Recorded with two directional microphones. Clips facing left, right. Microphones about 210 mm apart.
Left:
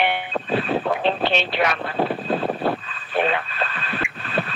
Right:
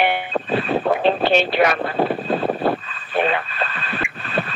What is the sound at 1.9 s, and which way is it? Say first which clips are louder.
Vehicle: right 2 dB; 50° right (ahead or behind).